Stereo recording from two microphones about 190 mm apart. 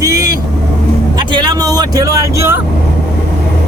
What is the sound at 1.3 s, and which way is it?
Speech, 25° right (ahead or behind).